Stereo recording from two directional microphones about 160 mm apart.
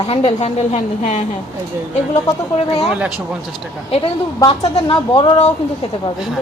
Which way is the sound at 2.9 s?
5° right (ahead or behind).